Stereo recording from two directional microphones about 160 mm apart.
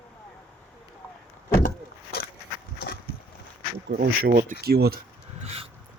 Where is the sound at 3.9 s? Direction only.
70° right (ahead or behind).